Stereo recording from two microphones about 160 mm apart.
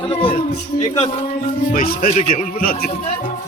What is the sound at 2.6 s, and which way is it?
Speech, 70° left (ahead or behind).